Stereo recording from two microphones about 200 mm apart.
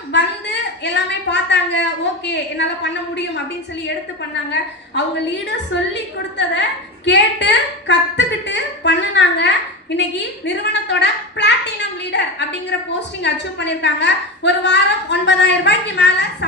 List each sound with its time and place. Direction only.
0.1 s a woman's voice: 60° left (ahead or behind)
5.5 s a woman's voice: 60° left (ahead or behind)